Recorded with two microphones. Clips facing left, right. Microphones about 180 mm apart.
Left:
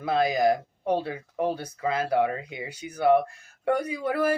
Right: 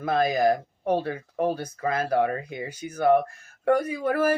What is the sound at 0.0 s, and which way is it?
Speech, 15° left (ahead or behind).